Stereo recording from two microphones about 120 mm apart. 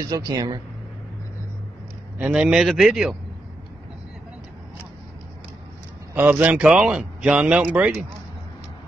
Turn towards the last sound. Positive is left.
turn(degrees=-10)  # may be behind; listen again after turning